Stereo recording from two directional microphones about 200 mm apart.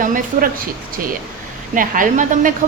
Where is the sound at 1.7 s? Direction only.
40° right (ahead or behind).